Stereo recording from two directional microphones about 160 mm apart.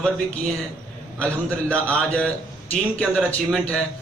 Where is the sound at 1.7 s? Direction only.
10° left (ahead or behind).